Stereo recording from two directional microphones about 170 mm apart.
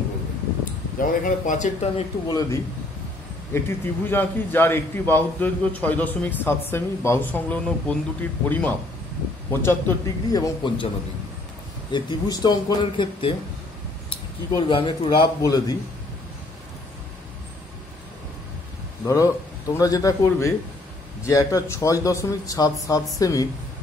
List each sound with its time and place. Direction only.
0.9 s a man's voice: 50° left (ahead or behind)
2.2 s a man's voice: 20° left (ahead or behind)
11.9 s speech: 25° left (ahead or behind)
14.5 s speech: 30° left (ahead or behind)
19.0 s speech: 20° left (ahead or behind)